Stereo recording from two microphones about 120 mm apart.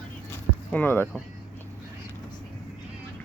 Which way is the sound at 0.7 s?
15° left (ahead or behind).